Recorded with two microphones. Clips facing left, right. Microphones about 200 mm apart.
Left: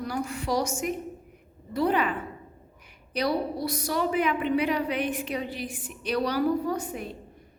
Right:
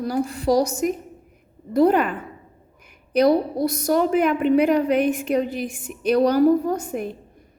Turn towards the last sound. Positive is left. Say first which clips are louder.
# right 5 dB
turn(degrees=-50)  # may be behind; listen again after turning